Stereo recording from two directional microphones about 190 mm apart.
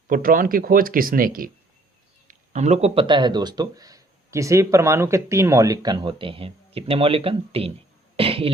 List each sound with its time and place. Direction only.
0.1 s speech: 50° right (ahead or behind); by 7.7 s 30° right (ahead or behind)
8.1 s cough: 30° right (ahead or behind)